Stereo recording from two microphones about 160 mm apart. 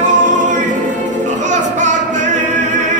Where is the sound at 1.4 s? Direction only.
50° right (ahead or behind).